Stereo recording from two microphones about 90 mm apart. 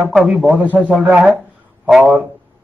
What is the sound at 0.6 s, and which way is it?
Speech, 20° right (ahead or behind).